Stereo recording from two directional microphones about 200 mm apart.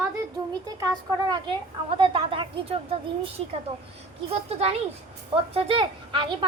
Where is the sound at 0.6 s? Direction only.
20° right (ahead or behind).